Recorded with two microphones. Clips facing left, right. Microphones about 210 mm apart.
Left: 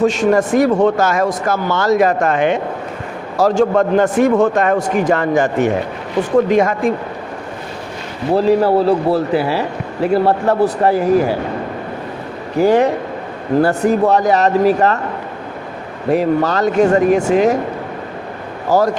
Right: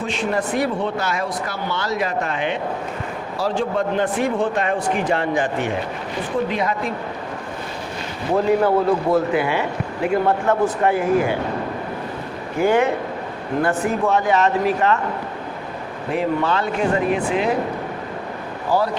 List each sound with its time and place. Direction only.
0.0 s speech: 45° left (ahead or behind)
8.4 s a man's voice: 35° left (ahead or behind)
12.5 s a man's voice: 35° left (ahead or behind)
16.0 s speech: 40° left (ahead or behind)
18.7 s speech: 45° left (ahead or behind)